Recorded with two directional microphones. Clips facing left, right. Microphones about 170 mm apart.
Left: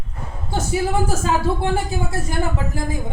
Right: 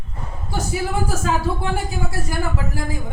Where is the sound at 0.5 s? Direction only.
25° left (ahead or behind).